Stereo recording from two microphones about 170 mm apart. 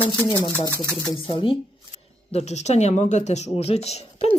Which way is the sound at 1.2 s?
30° left (ahead or behind).